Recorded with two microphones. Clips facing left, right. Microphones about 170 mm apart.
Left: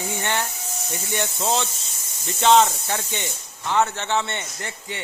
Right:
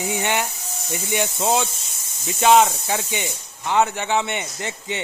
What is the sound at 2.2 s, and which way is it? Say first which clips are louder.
Speech: right 1 dB; 5° right (ahead or behind).